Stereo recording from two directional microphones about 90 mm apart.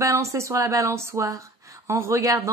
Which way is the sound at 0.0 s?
35° right (ahead or behind).